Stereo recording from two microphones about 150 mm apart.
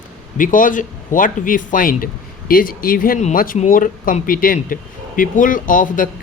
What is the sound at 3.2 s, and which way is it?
Speech, 60° left (ahead or behind).